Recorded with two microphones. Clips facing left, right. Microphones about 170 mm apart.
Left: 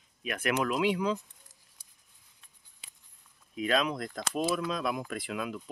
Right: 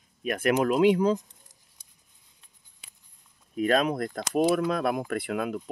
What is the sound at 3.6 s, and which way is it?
Speech, 45° right (ahead or behind).